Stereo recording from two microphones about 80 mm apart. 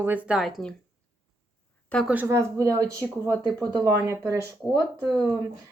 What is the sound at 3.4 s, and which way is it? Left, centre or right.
Speech, right.